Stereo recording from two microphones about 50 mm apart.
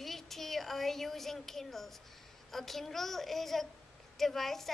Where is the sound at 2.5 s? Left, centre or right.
Centre.